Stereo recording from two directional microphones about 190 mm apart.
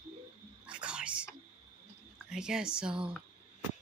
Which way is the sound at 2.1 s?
5° right (ahead or behind).